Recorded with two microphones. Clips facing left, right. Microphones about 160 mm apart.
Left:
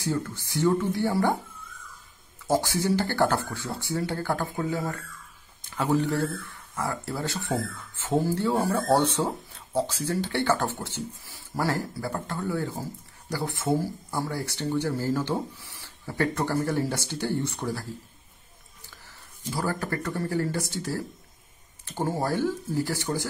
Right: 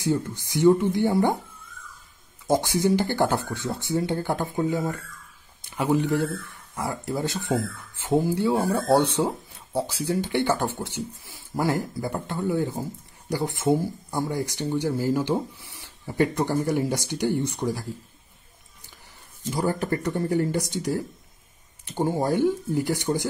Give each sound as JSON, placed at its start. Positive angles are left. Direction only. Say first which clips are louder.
{"t": 0.0, "sound": "speech", "louder": "right 4 dB", "side_deg": -20}
{"t": 2.4, "sound": "speech", "louder": "right 3 dB", "side_deg": -15}
{"t": 19.5, "sound": "speech", "louder": "right 4 dB", "side_deg": -20}